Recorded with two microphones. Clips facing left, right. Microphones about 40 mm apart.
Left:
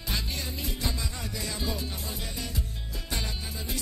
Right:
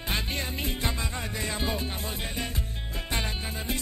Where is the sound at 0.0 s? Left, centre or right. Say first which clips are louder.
Right 3 dB; right.